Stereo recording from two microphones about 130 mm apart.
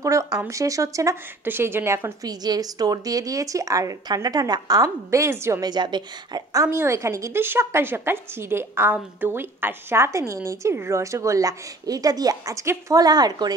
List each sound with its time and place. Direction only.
0.0 s a woman's voice: 25° right (ahead or behind)
5.7 s a woman's voice: 35° right (ahead or behind)